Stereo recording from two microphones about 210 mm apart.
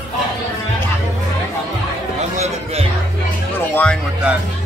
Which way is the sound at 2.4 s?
30° right (ahead or behind).